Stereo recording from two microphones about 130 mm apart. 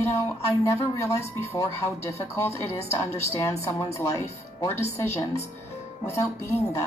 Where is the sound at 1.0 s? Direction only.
20° left (ahead or behind).